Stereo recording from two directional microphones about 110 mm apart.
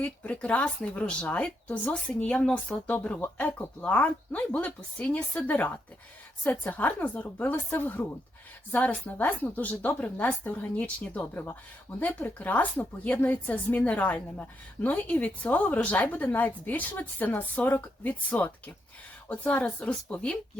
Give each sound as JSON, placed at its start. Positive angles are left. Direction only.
{"t": 0.0, "sound": "a woman's voice", "side_deg": 10}